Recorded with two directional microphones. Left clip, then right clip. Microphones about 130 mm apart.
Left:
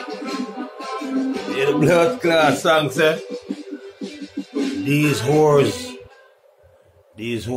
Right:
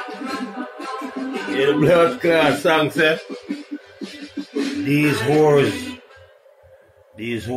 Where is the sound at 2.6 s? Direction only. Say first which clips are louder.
Even; 5° left (ahead or behind).